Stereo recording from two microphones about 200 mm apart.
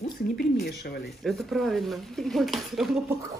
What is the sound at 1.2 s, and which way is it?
Speech, centre (ahead or behind).